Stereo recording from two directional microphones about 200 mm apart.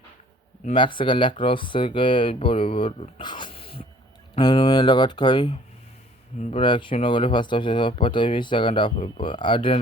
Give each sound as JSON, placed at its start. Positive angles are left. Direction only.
{"t": 0.6, "sound": "speech", "side_deg": 25}